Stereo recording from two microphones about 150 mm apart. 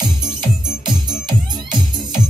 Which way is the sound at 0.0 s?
30° right (ahead or behind).